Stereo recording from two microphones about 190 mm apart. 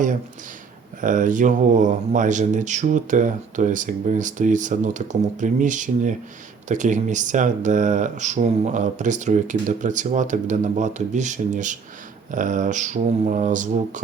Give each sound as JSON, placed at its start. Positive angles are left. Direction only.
{"t": 1.0, "sound": "speech", "side_deg": -45}